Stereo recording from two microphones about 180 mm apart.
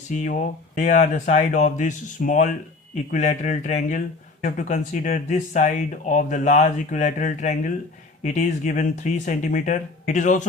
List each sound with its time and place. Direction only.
0.1 s speech: 45° left (ahead or behind)